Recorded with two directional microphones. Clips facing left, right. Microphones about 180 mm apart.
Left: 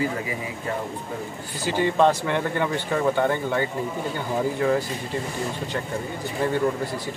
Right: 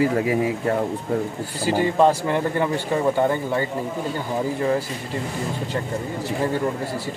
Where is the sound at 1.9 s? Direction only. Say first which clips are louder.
Right 1 dB; 5° right (ahead or behind).